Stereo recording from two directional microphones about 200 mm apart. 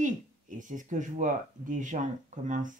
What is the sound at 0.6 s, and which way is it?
Speech, 40° right (ahead or behind).